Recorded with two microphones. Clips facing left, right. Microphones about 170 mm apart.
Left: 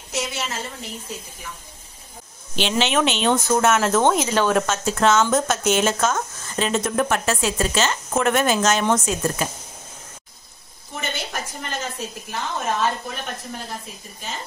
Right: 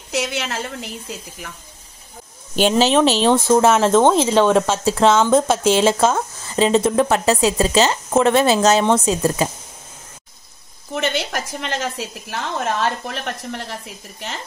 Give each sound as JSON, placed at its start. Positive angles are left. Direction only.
{"t": 0.1, "sound": "a woman's voice", "side_deg": -75}
{"t": 2.5, "sound": "a woman's voice", "side_deg": -45}
{"t": 2.9, "sound": "speech", "side_deg": -35}
{"t": 7.7, "sound": "speech", "side_deg": -35}
{"t": 11.0, "sound": "a woman's voice", "side_deg": -85}